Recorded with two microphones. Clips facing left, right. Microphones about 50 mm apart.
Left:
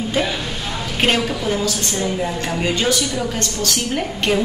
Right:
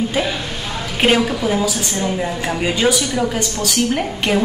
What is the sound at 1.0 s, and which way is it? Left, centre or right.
A woman's voice, centre.